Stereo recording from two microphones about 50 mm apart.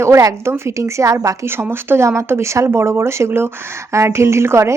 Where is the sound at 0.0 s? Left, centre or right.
Right.